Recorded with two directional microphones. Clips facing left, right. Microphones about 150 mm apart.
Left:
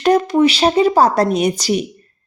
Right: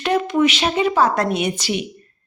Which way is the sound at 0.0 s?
40° left (ahead or behind).